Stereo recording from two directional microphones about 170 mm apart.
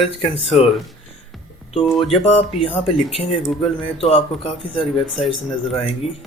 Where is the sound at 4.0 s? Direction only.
35° left (ahead or behind).